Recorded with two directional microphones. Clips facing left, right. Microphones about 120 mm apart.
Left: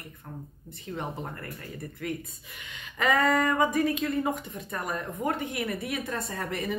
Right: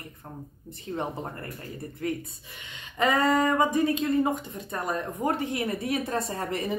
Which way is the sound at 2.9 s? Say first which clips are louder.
Right 1 dB; 30° right (ahead or behind).